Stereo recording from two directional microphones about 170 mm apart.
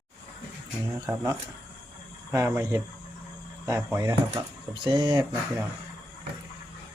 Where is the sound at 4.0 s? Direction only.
20° right (ahead or behind).